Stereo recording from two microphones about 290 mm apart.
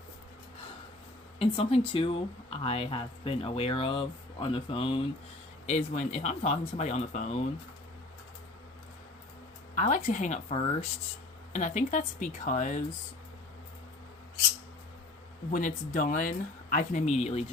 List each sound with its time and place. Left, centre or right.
1.4 s speech: centre
9.7 s speech: left
15.5 s speech: left